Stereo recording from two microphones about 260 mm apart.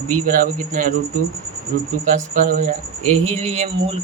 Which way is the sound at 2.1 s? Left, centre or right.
Right.